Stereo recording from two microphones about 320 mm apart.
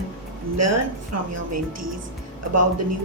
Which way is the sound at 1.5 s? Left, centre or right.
Right.